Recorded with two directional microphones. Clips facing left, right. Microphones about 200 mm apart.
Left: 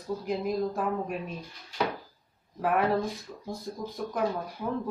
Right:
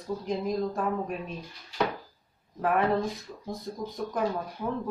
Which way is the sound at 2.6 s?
5° left (ahead or behind).